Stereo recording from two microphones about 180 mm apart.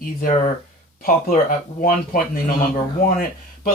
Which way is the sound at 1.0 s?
50° left (ahead or behind).